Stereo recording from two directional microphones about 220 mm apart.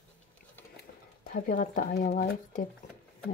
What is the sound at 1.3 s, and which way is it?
Speech, 40° left (ahead or behind).